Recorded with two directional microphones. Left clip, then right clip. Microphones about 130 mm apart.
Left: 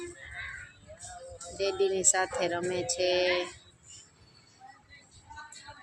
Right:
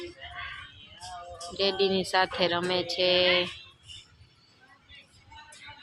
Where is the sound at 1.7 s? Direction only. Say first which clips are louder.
Right 1 dB; 25° right (ahead or behind).